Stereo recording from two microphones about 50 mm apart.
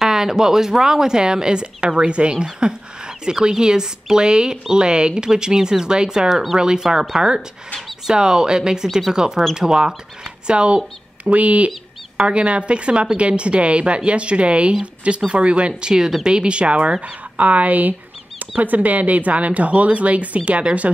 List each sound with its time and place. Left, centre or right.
0.0 s speech: centre
8.8 s speech: centre
9.1 s a woman's voice: centre